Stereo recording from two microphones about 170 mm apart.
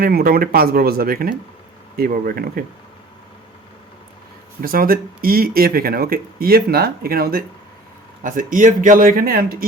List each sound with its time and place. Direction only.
0.0 s speech: 60° right (ahead or behind)
4.6 s speech: 60° right (ahead or behind)